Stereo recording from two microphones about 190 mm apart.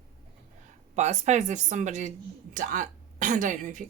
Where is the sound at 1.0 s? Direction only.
35° right (ahead or behind).